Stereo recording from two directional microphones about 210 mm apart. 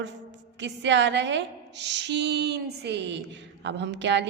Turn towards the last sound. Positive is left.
turn(degrees=-55)  # may be behind; listen again after turning